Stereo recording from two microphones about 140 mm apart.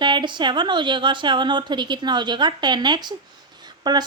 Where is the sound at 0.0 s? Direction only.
35° right (ahead or behind).